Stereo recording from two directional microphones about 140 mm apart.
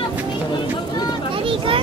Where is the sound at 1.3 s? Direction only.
40° right (ahead or behind).